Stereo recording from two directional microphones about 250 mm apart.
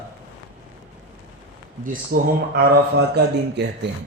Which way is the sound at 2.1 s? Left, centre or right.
Right.